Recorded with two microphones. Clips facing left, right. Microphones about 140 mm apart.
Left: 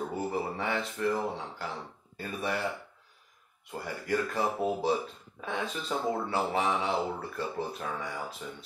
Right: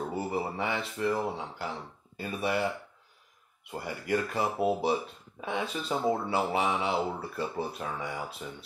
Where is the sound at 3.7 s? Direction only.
10° right (ahead or behind).